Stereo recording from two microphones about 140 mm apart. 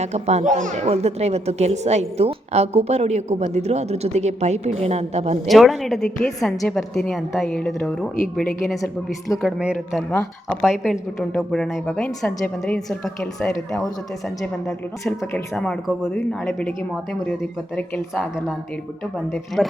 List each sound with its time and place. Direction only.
0.0 s a woman's voice: 55° right (ahead or behind)
5.5 s a woman's voice: centre (ahead or behind)
10.1 s a woman's voice: 10° left (ahead or behind)
19.6 s a woman's voice: centre (ahead or behind)